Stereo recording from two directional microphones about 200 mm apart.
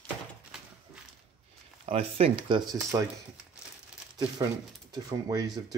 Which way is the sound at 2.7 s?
15° right (ahead or behind).